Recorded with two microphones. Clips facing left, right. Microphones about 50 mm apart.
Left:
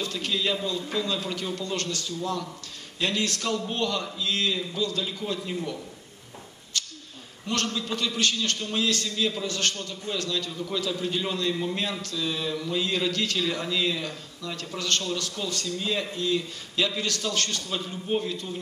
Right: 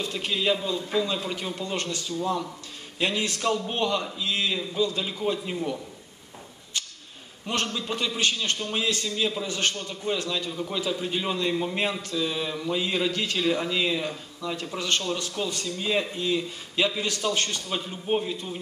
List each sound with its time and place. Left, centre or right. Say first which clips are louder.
0.0 s a man's voice: right 1 dB; right
6.7 s a sound: even; right
7.4 s a man's voice: even; right